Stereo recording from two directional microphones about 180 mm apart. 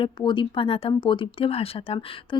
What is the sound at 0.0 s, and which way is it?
Speech, 25° left (ahead or behind).